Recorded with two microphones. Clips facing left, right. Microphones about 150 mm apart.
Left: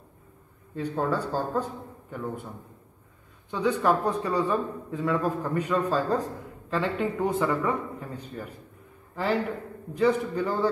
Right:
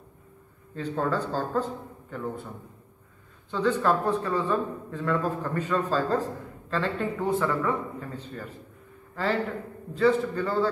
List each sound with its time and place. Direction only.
0.7 s a man's voice: 10° left (ahead or behind)